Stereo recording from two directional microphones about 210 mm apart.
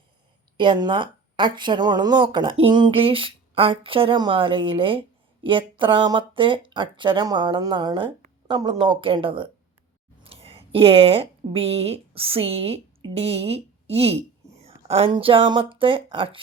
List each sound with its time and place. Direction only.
0.5 s a woman's voice: 20° right (ahead or behind)